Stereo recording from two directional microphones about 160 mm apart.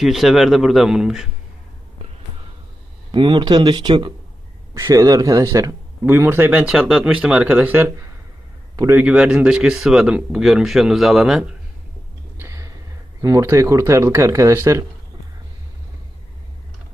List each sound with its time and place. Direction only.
0.0 s speech: centre (ahead or behind)
3.1 s a man's voice: 30° right (ahead or behind)
8.7 s a sound: 20° right (ahead or behind)
9.0 s speech: 5° right (ahead or behind)
12.4 s a sound: 20° right (ahead or behind)
13.2 s a man's voice: 20° right (ahead or behind)